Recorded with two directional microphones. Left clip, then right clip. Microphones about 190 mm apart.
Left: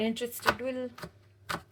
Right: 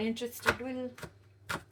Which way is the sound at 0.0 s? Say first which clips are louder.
Left 2 dB; 35° left (ahead or behind).